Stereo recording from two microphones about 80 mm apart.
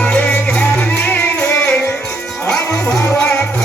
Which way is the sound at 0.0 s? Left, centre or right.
Centre.